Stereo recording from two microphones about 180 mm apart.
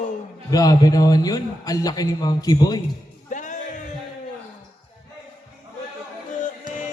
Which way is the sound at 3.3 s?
45° left (ahead or behind).